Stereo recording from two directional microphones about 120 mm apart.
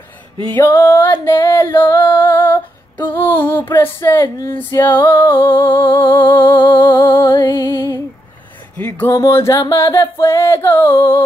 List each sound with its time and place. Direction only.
0.6 s singing: 20° left (ahead or behind)
1.2 s female singing: 40° left (ahead or behind)
1.5 s female singing: 20° left (ahead or behind)
4.8 s singing: 20° left (ahead or behind)
8.7 s a sound: 15° left (ahead or behind)
9.1 s singing: 25° left (ahead or behind)